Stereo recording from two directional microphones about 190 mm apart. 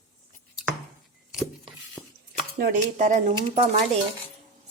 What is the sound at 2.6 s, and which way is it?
A woman's voice, 45° right (ahead or behind).